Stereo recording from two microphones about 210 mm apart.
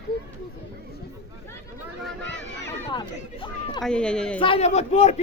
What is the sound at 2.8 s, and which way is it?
Chatter, 25° left (ahead or behind).